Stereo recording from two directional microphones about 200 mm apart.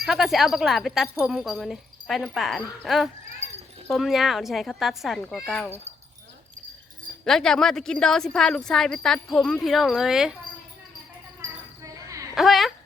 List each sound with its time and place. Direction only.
0.0 s a woman's voice: centre (ahead or behind)
7.3 s a woman's voice: centre (ahead or behind)
11.8 s a sound: 15° right (ahead or behind)
12.3 s speech: centre (ahead or behind)